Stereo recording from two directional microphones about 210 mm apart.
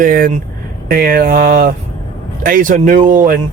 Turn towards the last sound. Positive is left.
turn(degrees=-40)  # may be behind; listen again after turning